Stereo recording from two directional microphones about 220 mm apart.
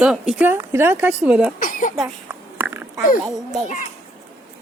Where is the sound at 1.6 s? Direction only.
40° left (ahead or behind).